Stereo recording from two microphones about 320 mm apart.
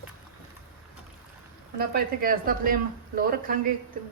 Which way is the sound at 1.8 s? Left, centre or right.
Right.